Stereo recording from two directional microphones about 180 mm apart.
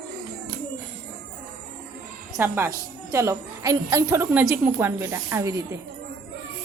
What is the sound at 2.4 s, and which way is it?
A woman's voice, 10° right (ahead or behind).